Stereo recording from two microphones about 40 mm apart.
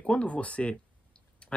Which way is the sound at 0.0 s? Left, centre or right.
Left.